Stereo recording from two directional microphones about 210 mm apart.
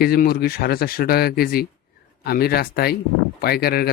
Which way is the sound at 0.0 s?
45° left (ahead or behind).